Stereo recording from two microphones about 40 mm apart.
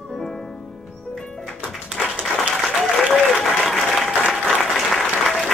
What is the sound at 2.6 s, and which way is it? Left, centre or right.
Applause, centre.